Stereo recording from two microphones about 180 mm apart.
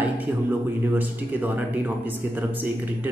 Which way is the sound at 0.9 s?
10° right (ahead or behind).